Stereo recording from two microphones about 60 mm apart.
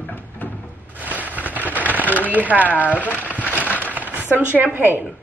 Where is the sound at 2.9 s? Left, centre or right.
Left.